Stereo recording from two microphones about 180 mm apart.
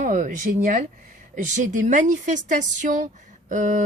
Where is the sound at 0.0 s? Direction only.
45° right (ahead or behind).